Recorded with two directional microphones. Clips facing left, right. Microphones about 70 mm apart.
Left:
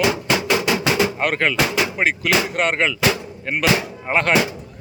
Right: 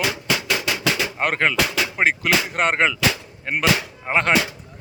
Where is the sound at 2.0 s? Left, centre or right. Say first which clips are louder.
Right 1 dB; right.